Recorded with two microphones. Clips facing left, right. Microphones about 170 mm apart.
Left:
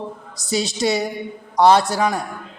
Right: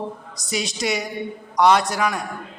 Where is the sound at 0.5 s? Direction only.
30° left (ahead or behind).